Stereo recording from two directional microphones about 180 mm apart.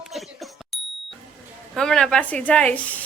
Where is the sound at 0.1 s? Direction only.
Centre (ahead or behind).